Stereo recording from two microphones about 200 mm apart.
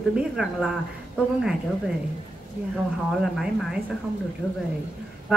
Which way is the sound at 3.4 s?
Centre (ahead or behind).